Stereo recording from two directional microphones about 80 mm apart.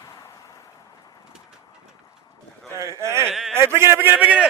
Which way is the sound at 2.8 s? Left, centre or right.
Right.